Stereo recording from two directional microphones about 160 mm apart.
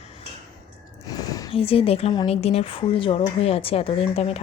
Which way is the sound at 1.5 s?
35° left (ahead or behind).